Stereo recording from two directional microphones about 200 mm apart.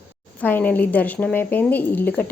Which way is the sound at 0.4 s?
10° left (ahead or behind).